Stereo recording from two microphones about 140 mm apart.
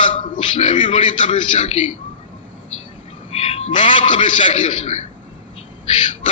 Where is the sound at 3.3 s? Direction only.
45° left (ahead or behind).